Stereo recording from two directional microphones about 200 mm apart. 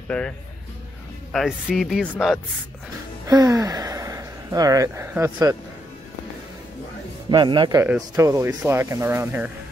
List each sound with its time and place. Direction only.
0.1 s speech: 5° left (ahead or behind)
1.3 s speech: centre (ahead or behind)
3.3 s speech: 20° right (ahead or behind)
7.2 s a man's voice: 20° right (ahead or behind)
7.8 s speech: 10° right (ahead or behind)